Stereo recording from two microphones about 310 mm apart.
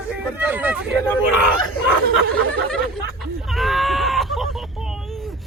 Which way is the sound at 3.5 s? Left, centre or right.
Centre.